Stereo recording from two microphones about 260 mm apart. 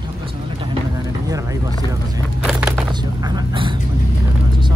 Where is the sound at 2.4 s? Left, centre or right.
Centre.